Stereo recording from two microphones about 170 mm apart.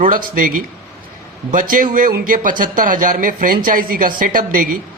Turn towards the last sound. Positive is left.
turn(degrees=-55)  # may be behind; listen again after turning